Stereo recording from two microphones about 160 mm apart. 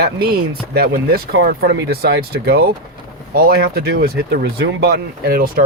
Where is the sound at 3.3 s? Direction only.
70° right (ahead or behind).